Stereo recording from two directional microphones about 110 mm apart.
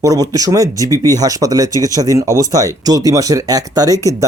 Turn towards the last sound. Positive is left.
turn(degrees=-35)  # may be behind; listen again after turning